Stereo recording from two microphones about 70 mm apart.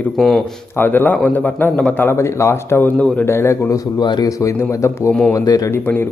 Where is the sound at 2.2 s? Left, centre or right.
Left.